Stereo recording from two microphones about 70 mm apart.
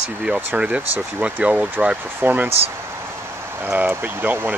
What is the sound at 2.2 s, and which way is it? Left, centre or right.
Speech, right.